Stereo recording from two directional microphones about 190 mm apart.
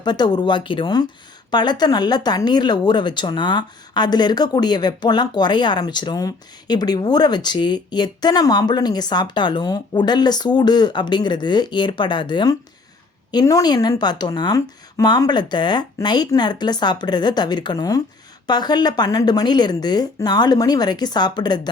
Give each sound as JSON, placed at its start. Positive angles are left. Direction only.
{"t": 0.0, "sound": "speech", "side_deg": 20}